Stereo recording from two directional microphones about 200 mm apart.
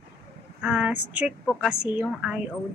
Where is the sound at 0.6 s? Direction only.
5° right (ahead or behind).